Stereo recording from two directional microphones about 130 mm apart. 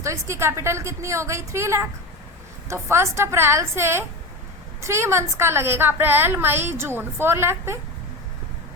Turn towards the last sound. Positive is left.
turn(degrees=-20)  # may be behind; listen again after turning